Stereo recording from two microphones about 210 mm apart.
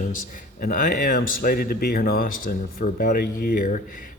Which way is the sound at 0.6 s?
40° left (ahead or behind).